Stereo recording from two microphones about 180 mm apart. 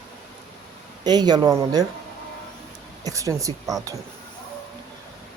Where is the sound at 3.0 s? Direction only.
20° right (ahead or behind).